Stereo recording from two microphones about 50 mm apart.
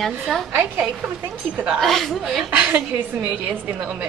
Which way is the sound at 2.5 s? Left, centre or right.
Right.